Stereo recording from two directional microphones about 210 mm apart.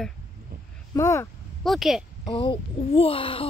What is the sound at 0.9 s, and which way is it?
Speech, 15° left (ahead or behind).